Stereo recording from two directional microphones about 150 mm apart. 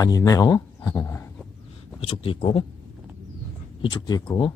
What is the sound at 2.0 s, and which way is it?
Speech, 40° left (ahead or behind).